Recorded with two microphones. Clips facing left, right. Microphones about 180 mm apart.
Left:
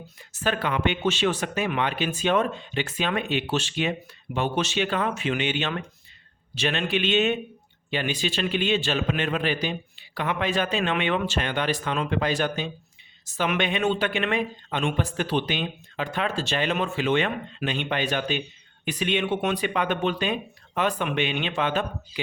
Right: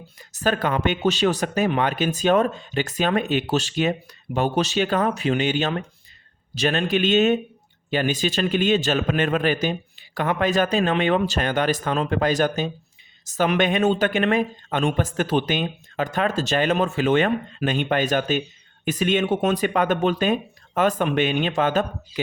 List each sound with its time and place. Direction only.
0.2 s speech: 40° right (ahead or behind)